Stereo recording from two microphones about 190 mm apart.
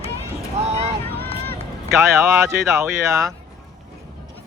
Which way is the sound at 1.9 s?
15° right (ahead or behind).